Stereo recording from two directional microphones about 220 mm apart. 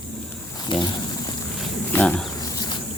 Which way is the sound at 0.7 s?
20° left (ahead or behind).